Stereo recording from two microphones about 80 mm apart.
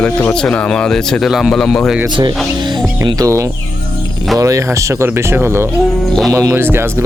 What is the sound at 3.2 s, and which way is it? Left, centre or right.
Speech, right.